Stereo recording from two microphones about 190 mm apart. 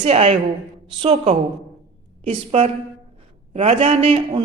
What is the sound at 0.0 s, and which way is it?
A man's voice, 30° right (ahead or behind).